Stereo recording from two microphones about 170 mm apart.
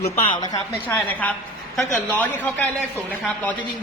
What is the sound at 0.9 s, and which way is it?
A man's voice, 10° left (ahead or behind).